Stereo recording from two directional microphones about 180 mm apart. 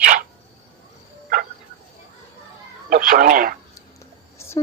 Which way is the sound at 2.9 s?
50° right (ahead or behind).